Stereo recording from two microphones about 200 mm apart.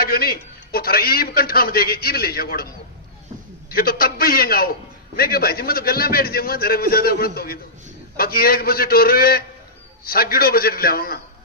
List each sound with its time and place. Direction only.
0.0 s a man's voice: 50° left (ahead or behind)
3.7 s a man's voice: 50° left (ahead or behind)